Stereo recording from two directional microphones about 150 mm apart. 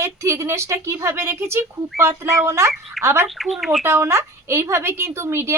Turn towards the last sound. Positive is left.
turn(degrees=-15)  # may be behind; listen again after turning